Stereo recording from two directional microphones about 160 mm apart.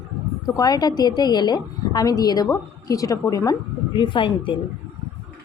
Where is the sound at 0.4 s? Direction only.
25° left (ahead or behind).